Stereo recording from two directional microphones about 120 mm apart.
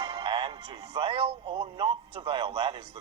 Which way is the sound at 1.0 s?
50° right (ahead or behind).